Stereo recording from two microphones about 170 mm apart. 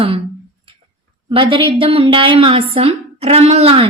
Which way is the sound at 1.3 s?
30° right (ahead or behind).